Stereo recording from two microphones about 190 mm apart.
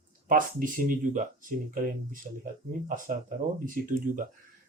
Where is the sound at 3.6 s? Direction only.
45° right (ahead or behind).